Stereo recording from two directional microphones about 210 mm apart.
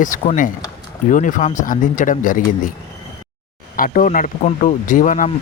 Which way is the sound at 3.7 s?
40° left (ahead or behind).